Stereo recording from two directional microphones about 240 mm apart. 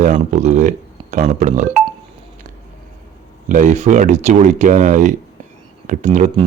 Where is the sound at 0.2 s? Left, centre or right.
Right.